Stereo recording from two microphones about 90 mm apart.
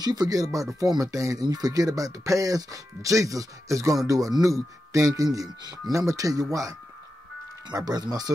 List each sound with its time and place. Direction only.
0.0 s speech: 50° right (ahead or behind)
7.6 s speech: 50° right (ahead or behind)